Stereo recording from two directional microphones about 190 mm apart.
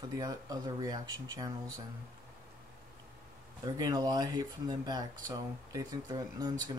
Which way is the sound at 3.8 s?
20° right (ahead or behind).